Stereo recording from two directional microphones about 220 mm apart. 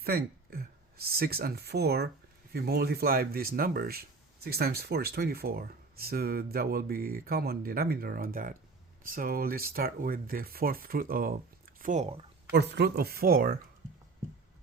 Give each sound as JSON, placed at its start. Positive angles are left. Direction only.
{"t": 0.0, "sound": "speech", "side_deg": -45}
{"t": 12.5, "sound": "speech", "side_deg": -50}